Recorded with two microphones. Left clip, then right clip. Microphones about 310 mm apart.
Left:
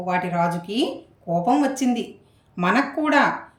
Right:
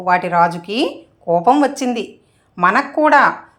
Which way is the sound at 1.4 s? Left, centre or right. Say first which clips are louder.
Right 5 dB; centre.